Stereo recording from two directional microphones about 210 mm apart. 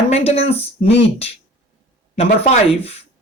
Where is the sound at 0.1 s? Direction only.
30° left (ahead or behind).